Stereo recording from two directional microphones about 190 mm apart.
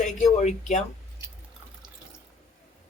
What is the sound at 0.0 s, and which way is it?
Speech, 40° left (ahead or behind).